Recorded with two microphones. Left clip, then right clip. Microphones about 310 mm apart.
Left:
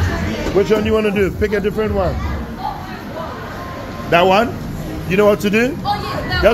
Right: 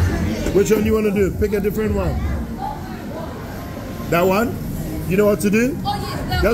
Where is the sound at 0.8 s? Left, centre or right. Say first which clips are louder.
Left 2 dB; centre.